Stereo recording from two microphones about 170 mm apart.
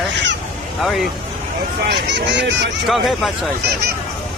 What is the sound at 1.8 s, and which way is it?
Speech, 90° right.